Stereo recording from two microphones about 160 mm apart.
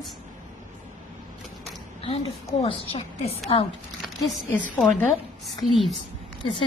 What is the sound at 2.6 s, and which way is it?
A woman's voice, 40° left (ahead or behind).